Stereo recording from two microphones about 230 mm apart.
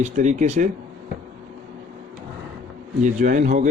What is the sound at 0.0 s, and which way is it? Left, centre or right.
Speech, right.